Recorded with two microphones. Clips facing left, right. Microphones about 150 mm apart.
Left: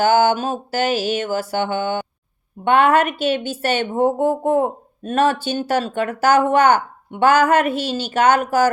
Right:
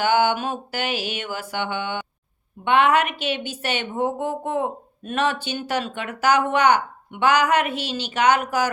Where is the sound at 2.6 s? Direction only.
45° left (ahead or behind).